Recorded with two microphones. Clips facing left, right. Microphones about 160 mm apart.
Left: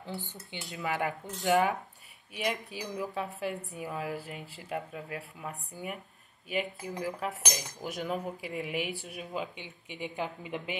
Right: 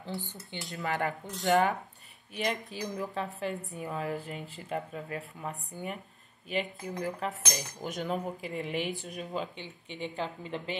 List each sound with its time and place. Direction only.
0.1 s speech: 15° right (ahead or behind)
0.7 s a woman's voice: 5° left (ahead or behind)